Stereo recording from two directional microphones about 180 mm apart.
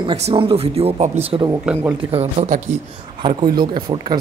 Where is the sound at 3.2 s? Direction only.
25° right (ahead or behind).